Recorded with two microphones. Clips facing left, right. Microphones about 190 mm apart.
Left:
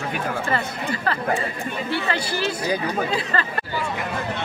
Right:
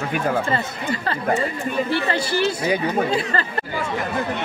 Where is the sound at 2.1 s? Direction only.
25° right (ahead or behind).